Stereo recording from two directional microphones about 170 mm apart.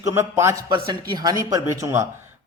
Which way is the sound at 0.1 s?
15° right (ahead or behind).